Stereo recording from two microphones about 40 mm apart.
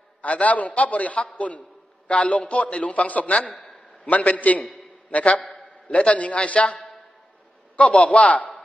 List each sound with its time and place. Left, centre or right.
0.2 s a man's voice: left